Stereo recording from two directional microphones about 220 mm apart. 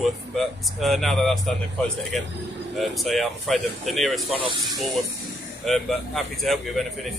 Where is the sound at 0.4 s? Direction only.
Centre (ahead or behind).